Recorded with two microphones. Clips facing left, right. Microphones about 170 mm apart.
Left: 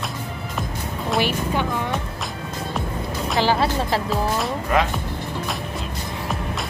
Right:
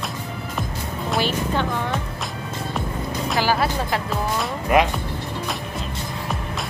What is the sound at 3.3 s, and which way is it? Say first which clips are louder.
Music: left 2 dB; 25° left (ahead or behind).